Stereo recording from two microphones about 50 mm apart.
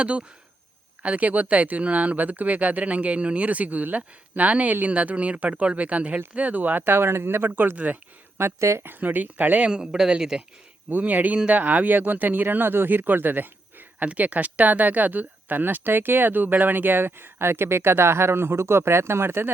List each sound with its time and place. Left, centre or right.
0.0 s speech: right
8.4 s speech: right
8.8 s speech: right
9.6 s speech: centre
10.8 s speech: right
14.0 s speech: right